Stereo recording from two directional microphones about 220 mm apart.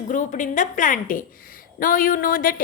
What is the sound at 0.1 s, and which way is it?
A woman's voice, 35° left (ahead or behind).